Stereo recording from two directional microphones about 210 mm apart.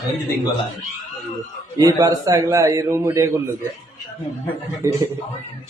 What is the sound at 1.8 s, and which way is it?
A man's voice, 15° right (ahead or behind).